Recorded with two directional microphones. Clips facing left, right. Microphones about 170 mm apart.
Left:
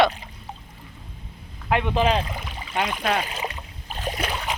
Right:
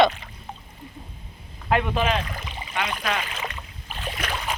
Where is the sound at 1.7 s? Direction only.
20° left (ahead or behind).